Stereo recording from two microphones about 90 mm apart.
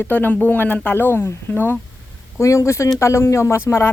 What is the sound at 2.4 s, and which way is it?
Speech, 35° left (ahead or behind).